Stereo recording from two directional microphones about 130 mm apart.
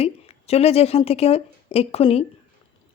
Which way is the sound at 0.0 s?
55° left (ahead or behind).